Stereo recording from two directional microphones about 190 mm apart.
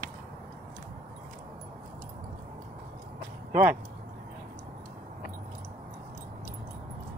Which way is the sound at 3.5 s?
50° right (ahead or behind).